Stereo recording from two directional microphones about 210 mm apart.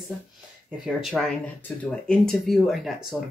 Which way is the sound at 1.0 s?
Centre (ahead or behind).